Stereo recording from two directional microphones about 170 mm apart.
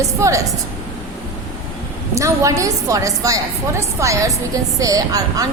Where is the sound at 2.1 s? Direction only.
20° right (ahead or behind).